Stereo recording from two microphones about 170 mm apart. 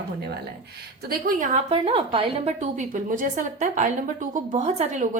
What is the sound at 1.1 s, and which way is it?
Speech, 55° right (ahead or behind).